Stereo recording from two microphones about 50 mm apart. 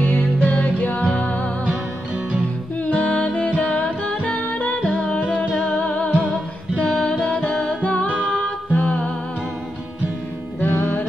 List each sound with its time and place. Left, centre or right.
0.2 s music: left
2.8 s music: left
10.6 s music: left